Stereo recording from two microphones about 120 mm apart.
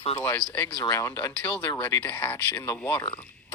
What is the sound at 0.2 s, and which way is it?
Speech, 25° left (ahead or behind).